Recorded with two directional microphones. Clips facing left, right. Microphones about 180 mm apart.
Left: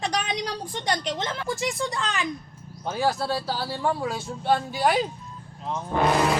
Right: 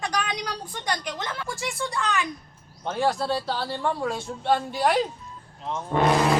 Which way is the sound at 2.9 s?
Centre (ahead or behind).